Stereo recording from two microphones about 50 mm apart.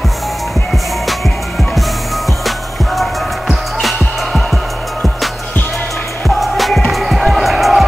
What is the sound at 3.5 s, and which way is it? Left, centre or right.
Music, centre.